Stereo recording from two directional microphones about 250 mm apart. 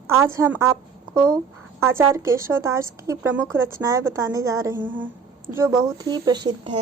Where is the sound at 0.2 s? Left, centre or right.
Centre.